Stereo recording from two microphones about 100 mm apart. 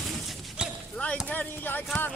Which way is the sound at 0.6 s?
10° right (ahead or behind).